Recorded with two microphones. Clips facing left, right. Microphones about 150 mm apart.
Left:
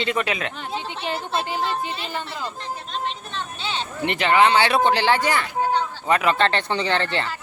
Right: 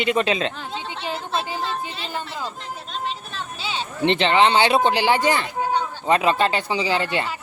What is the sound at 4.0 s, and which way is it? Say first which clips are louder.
Speech: right 1 dB; 25° right (ahead or behind).